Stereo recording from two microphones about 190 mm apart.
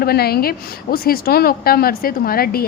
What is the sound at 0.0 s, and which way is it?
A woman's voice, 55° left (ahead or behind).